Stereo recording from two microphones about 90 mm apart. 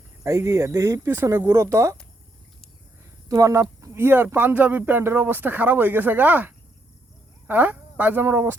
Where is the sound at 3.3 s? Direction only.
40° right (ahead or behind).